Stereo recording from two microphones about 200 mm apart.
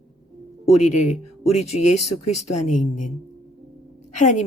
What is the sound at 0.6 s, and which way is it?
Speech, 35° left (ahead or behind).